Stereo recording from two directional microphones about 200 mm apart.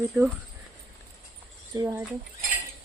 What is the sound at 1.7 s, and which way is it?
Speech, 15° right (ahead or behind).